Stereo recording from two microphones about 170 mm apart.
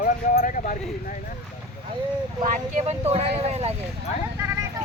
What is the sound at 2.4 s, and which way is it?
Speech, 45° right (ahead or behind).